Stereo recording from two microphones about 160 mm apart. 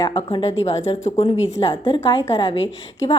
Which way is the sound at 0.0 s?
30° left (ahead or behind).